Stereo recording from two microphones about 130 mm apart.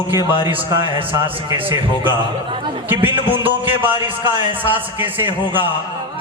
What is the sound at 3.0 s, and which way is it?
A man's voice, 15° right (ahead or behind).